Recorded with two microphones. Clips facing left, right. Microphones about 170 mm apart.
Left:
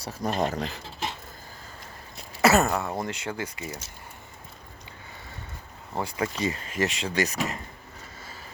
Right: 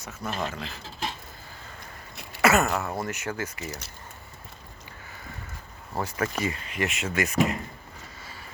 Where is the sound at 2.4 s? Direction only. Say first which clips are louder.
Left 1 dB; 35° left (ahead or behind).